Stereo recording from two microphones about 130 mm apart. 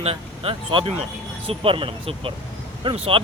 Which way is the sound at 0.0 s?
45° right (ahead or behind).